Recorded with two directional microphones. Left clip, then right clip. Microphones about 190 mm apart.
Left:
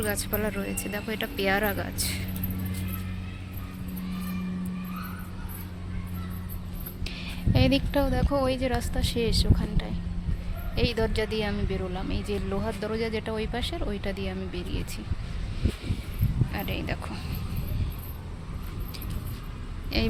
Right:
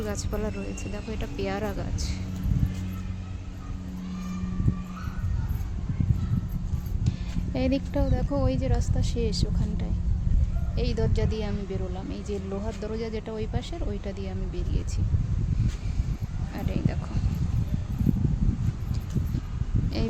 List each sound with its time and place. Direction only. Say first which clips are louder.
0.0 s a woman's voice: left 3 dB; 10° right (ahead or behind)
7.5 s a woman's voice: left 3 dB; 10° right (ahead or behind)
16.6 s a woman's voice: even; 5° right (ahead or behind)